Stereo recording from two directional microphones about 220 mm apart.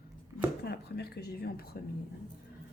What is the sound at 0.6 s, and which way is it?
Speech, 45° left (ahead or behind).